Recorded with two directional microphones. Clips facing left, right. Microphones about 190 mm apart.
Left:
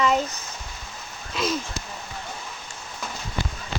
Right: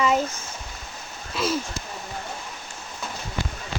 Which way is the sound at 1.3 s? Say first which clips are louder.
Right 1 dB; 10° right (ahead or behind).